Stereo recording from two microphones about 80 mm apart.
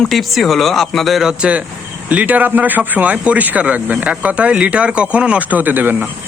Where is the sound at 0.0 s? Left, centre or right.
Centre.